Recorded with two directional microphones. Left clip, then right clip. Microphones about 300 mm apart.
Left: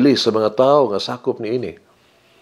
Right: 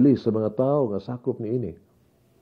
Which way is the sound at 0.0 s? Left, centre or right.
Centre.